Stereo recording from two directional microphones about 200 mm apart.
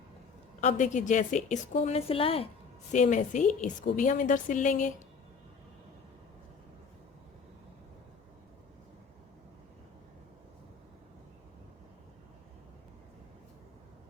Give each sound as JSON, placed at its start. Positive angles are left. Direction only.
{"t": 0.6, "sound": "a woman's voice", "side_deg": 35}